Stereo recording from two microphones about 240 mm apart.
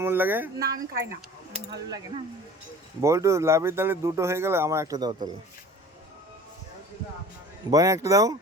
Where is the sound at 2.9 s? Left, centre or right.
Centre.